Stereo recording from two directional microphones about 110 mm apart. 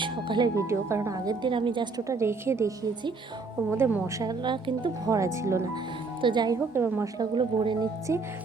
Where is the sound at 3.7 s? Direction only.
20° right (ahead or behind).